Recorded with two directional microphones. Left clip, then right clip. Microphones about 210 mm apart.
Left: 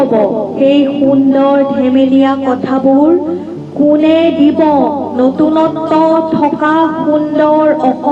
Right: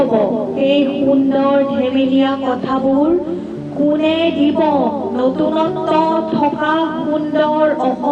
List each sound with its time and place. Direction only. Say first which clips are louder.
1.4 s speech: left 4 dB; 45° left (ahead or behind)
4.2 s music: left 5 dB; 40° left (ahead or behind)